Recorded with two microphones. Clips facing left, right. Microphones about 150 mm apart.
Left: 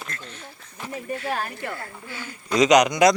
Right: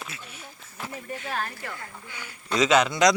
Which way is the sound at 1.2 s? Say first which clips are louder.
Left 2 dB; 30° left (ahead or behind).